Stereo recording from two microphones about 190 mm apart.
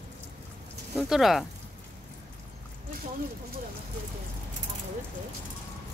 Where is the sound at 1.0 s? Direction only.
Centre (ahead or behind).